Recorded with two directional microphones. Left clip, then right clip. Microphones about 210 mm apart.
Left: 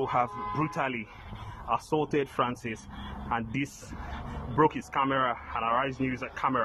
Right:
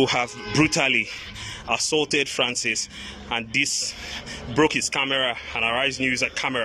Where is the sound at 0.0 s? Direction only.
25° right (ahead or behind).